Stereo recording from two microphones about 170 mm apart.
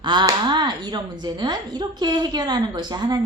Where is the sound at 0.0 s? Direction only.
25° right (ahead or behind).